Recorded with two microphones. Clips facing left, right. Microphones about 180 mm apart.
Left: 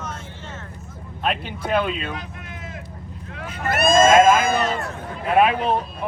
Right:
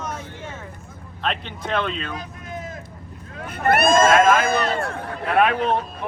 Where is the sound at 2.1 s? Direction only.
40° right (ahead or behind).